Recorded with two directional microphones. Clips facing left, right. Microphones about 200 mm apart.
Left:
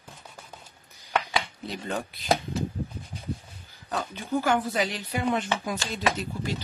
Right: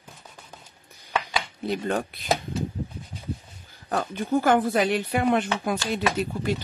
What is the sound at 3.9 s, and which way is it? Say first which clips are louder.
Speech: right 5 dB; 50° right (ahead or behind).